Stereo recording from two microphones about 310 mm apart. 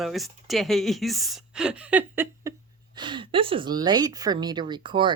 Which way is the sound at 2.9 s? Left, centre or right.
Centre.